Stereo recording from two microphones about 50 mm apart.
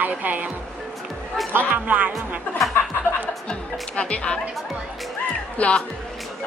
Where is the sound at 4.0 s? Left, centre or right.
Centre.